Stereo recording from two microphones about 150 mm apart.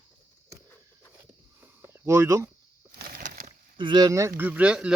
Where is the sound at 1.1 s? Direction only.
15° right (ahead or behind).